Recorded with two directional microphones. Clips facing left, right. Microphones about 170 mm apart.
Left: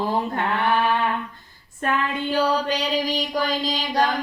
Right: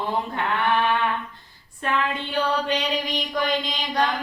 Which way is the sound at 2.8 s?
35° left (ahead or behind).